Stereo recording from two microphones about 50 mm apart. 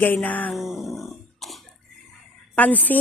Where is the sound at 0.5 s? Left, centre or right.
Centre.